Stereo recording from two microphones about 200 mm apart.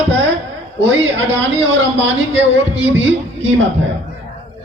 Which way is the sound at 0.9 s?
65° right (ahead or behind).